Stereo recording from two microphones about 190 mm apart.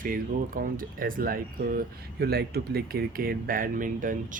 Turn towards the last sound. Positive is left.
turn(degrees=-45)  # may be behind; listen again after turning